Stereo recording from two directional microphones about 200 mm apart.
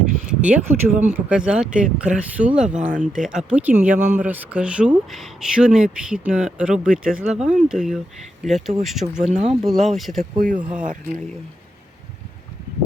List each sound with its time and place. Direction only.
0.3 s speech: 5° right (ahead or behind)
2.8 s speech: 40° right (ahead or behind)
3.2 s speech: 5° right (ahead or behind)
9.3 s speech: 35° right (ahead or behind)
9.6 s speech: centre (ahead or behind)
10.4 s speech: 45° right (ahead or behind)